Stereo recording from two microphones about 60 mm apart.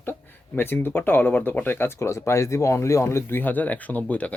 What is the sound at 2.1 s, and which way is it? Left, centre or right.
Speech, left.